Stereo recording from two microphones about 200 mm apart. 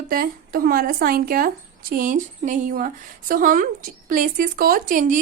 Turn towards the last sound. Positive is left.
turn(degrees=-40)  # may be behind; listen again after turning